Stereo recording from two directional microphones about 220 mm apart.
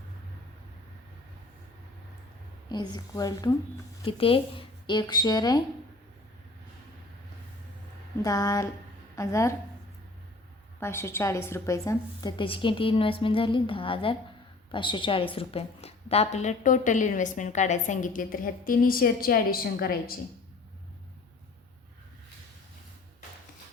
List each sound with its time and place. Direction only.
2.6 s a woman's voice: 20° left (ahead or behind)
8.2 s speech: 15° left (ahead or behind)
10.8 s a woman's voice: 10° left (ahead or behind); by 20.1 s 40° left (ahead or behind)